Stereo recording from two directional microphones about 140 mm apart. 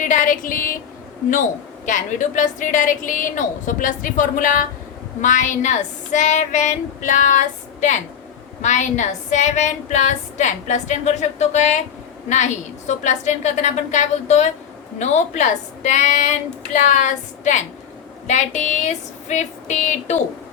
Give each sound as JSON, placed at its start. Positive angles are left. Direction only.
{"t": 0.0, "sound": "a woman's voice", "side_deg": 70}
{"t": 1.3, "sound": "a woman's voice", "side_deg": 65}
{"t": 12.9, "sound": "a woman's voice", "side_deg": 55}